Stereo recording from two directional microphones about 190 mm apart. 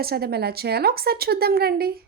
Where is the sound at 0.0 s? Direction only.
55° right (ahead or behind).